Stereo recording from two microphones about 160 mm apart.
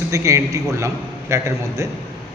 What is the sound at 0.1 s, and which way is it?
A man's voice, 20° right (ahead or behind).